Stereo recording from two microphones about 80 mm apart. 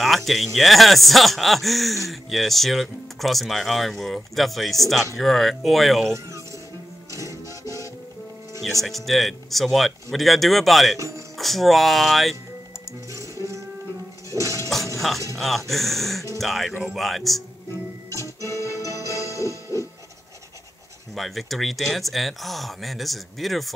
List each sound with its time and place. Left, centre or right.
0.0 s speech: centre
7.1 s music: right
8.8 s speech: centre
11.0 s speech: right
11.3 s speech: centre
13.1 s music: right
15.3 s speech: centre
18.7 s music: right
21.1 s speech: centre